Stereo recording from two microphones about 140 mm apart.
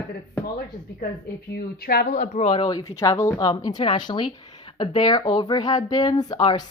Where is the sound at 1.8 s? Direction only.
75° left (ahead or behind); by 2.4 s 60° left (ahead or behind).